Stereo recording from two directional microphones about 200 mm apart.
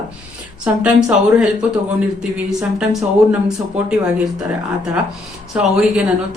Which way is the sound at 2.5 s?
5° right (ahead or behind).